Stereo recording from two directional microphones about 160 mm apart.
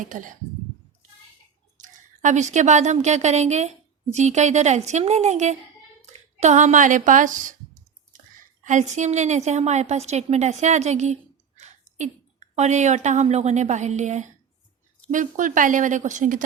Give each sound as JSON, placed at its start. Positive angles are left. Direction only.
{"t": 0.0, "sound": "speech", "side_deg": -55}
{"t": 1.8, "sound": "a woman's voice", "side_deg": -50}
{"t": 8.6, "sound": "a woman's voice", "side_deg": -50}